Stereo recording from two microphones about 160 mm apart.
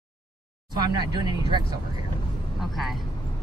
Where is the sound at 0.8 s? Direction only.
25° right (ahead or behind).